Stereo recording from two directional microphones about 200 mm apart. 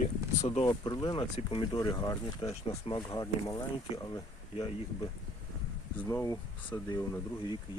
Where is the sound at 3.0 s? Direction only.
15° left (ahead or behind).